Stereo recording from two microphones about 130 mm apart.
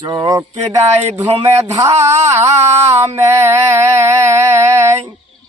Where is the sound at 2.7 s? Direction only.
55° right (ahead or behind).